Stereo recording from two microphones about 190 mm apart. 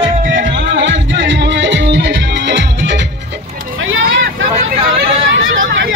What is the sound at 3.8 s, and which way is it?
Vehicle, 90° right.